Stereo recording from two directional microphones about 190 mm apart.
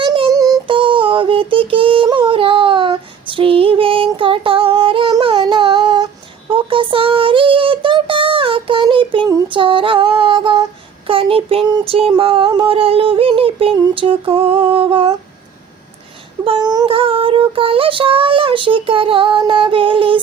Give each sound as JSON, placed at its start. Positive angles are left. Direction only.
{"t": 0.0, "sound": "synthetic singing", "side_deg": -20}
{"t": 6.5, "sound": "child singing", "side_deg": -30}
{"t": 16.4, "sound": "child singing", "side_deg": -25}